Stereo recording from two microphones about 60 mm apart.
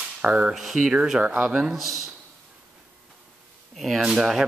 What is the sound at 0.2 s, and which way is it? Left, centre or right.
A man's voice, centre.